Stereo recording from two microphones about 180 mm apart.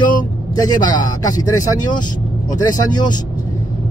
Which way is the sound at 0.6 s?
20° left (ahead or behind).